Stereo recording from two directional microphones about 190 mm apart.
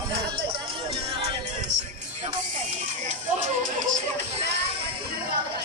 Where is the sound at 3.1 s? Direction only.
40° right (ahead or behind).